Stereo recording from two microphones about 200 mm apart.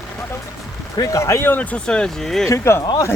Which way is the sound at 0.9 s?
15° left (ahead or behind).